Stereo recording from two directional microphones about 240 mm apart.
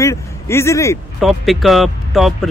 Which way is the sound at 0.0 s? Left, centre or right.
Centre.